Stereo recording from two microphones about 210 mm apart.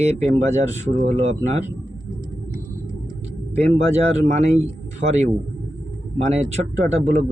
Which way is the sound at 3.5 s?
30° right (ahead or behind).